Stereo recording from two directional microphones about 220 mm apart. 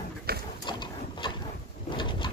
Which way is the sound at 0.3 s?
45° right (ahead or behind).